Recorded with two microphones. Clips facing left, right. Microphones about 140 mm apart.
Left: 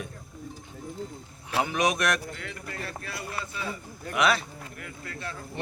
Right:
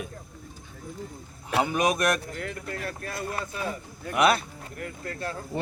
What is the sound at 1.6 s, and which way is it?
Speech, 40° right (ahead or behind).